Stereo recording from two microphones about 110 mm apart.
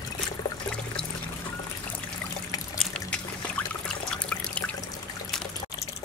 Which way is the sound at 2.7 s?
10° left (ahead or behind).